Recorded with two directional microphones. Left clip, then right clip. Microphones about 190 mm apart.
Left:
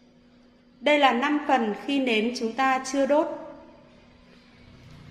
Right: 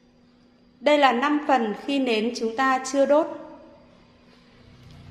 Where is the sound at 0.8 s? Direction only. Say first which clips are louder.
Right 2 dB; 20° right (ahead or behind).